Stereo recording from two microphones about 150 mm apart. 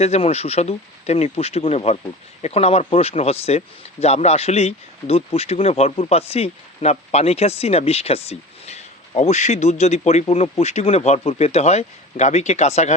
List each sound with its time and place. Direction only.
0.0 s speech: 45° left (ahead or behind)